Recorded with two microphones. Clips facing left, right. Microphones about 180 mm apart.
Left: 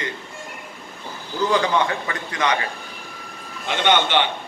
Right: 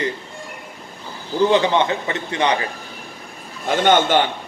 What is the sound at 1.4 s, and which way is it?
A man's voice, 25° right (ahead or behind).